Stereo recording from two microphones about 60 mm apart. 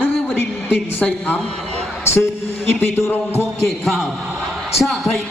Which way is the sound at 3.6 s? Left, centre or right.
Centre.